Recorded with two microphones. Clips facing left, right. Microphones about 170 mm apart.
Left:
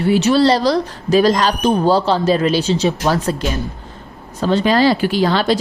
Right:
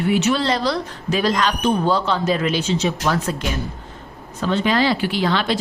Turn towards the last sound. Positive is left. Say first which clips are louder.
# left 5 dB
turn(degrees=40)  # may be behind; listen again after turning